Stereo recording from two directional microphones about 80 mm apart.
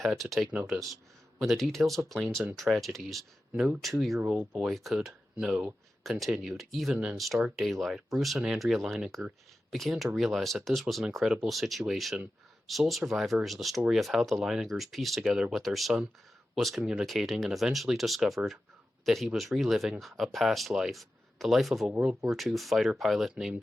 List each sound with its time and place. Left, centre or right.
0.0 s speech: centre
4.7 s speech: centre
6.0 s speech: centre
6.9 s speech: centre
7.5 s speech: centre